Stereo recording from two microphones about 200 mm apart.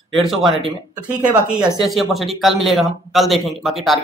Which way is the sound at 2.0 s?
Centre (ahead or behind).